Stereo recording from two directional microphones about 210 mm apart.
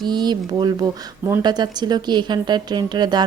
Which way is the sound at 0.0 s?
20° right (ahead or behind).